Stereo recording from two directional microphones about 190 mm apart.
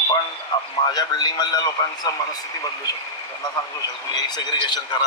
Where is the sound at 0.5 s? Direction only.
20° left (ahead or behind).